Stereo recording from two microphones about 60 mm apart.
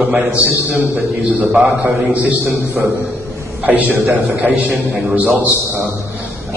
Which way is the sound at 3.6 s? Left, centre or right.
Right.